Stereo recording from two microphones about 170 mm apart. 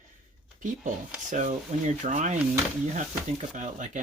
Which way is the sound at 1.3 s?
45° right (ahead or behind).